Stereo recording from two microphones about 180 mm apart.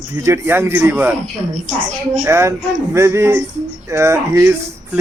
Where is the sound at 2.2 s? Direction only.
15° right (ahead or behind).